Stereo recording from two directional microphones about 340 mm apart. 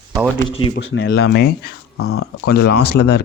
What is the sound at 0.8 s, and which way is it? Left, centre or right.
Speech, left.